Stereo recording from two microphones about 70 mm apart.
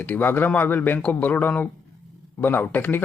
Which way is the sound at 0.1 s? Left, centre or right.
Left.